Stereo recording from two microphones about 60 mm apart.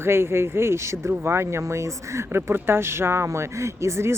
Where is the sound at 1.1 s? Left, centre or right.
Right.